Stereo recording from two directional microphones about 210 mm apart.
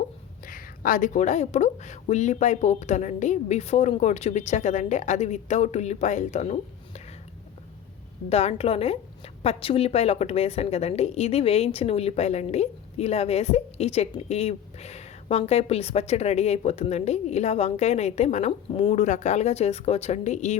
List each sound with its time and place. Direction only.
0.4 s a woman's voice: 40° left (ahead or behind)
8.3 s a woman's voice: 30° left (ahead or behind)